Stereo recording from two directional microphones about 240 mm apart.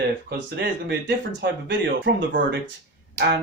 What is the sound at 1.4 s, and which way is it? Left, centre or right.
Speech, right.